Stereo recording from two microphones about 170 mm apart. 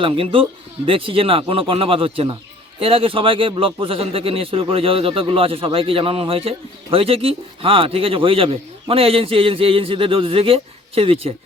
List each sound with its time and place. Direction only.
0.0 s a man's voice: 30° right (ahead or behind)